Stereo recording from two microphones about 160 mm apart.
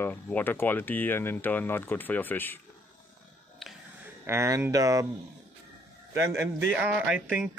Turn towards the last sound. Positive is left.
turn(degrees=-10)  # may be behind; listen again after turning